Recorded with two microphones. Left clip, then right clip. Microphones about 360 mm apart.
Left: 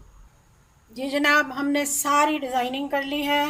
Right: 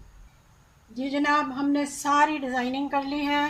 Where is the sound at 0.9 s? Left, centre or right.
Left.